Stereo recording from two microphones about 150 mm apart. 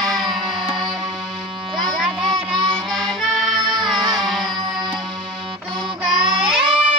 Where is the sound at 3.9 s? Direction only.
25° right (ahead or behind).